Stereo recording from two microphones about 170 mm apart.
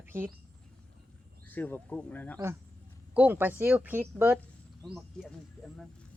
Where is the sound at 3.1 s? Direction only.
10° right (ahead or behind).